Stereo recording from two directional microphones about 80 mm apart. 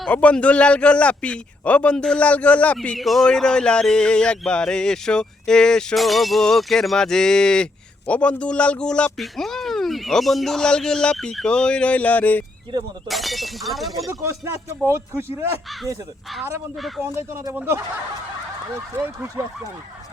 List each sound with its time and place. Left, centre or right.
0.1 s a sound: centre
3.0 s a sound: centre; by 12.5 s left
13.1 s speech: centre
14.1 s speech: right
17.5 s speech: right
18.9 s speech: right